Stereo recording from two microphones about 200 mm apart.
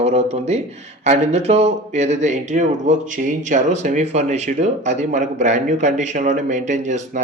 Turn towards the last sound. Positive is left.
turn(degrees=-35)  # may be behind; listen again after turning